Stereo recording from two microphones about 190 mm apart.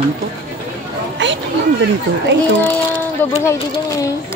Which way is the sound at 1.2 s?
75° right (ahead or behind).